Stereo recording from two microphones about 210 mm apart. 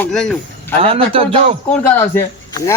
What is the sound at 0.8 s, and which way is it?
Speech, 25° right (ahead or behind).